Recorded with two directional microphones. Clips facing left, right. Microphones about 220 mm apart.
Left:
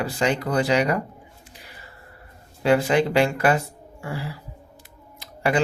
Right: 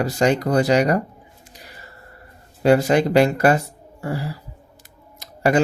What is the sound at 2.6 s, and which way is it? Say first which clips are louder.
Speech: right 3 dB; 40° right (ahead or behind).